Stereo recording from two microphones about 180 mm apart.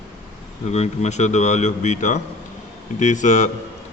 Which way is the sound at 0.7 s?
40° left (ahead or behind).